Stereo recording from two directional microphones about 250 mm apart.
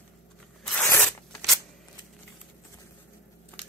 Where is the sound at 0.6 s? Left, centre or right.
Centre.